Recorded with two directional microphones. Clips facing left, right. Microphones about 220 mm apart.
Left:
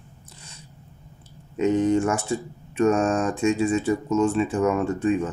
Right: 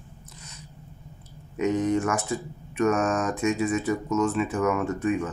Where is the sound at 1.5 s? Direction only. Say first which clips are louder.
Left 4 dB; 30° left (ahead or behind).